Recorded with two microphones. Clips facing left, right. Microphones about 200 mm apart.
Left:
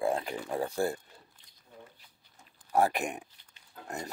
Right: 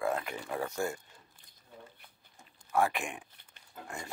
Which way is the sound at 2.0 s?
55° right (ahead or behind).